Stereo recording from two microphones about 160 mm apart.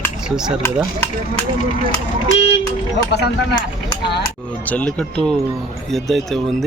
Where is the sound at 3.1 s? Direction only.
90° left.